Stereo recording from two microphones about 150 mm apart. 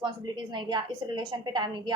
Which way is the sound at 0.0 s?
30° right (ahead or behind).